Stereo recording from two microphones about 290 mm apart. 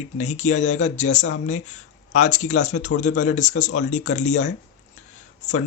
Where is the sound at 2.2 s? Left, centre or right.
Left.